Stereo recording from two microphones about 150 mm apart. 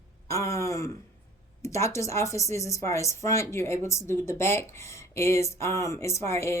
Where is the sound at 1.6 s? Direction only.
20° left (ahead or behind).